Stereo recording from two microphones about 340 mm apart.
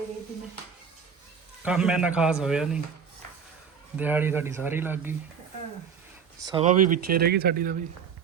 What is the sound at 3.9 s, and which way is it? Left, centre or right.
A man's voice, centre.